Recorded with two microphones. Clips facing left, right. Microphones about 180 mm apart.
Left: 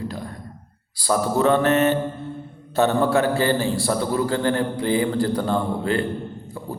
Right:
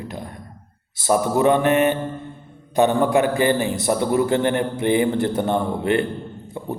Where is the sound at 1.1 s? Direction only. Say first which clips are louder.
Right 2 dB; 15° right (ahead or behind).